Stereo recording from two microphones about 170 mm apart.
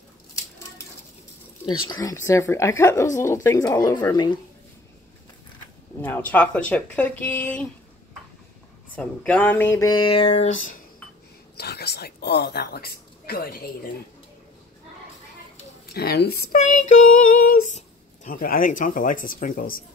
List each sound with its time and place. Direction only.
1.7 s speech: 20° left (ahead or behind)
5.9 s speech: 10° left (ahead or behind)
8.9 s speech: 10° left (ahead or behind); by 10.5 s 35° left (ahead or behind)
11.5 s speech: 70° left (ahead or behind)
15.9 s speech: 70° left (ahead or behind)
16.5 s speech: 45° left (ahead or behind)